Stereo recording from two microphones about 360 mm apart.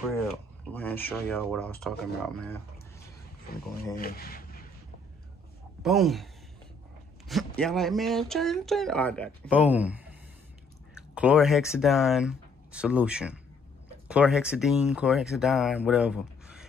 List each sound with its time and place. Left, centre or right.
0.7 s speech: centre
3.9 s speech: left
5.8 s speech: centre
11.1 s speech: centre